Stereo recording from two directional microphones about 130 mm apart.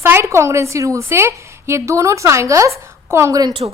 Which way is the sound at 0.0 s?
20° right (ahead or behind).